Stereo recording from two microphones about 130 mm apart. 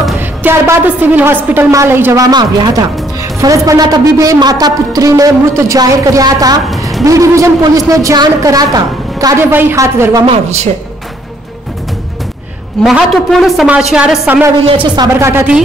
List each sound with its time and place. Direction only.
0.2 s a woman's voice: 15° right (ahead or behind)
2.2 s a woman's voice: 30° right (ahead or behind)
9.5 s a woman's voice: 15° right (ahead or behind)
10.2 s speech: 55° right (ahead or behind)
12.8 s a woman's voice: centre (ahead or behind)
14.6 s speech: 45° right (ahead or behind)
15.1 s a woman's voice: 20° right (ahead or behind)